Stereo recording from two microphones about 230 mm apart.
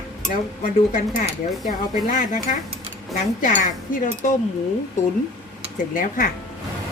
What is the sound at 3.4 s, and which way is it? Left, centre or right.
Speech, left.